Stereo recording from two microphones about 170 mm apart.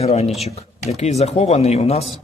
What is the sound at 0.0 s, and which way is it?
A man's voice, 40° left (ahead or behind).